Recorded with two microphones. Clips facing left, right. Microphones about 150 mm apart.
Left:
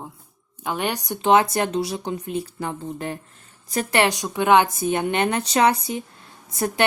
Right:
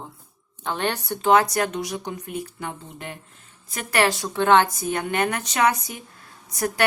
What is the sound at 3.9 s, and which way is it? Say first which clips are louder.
Speech: even; 20° left (ahead or behind).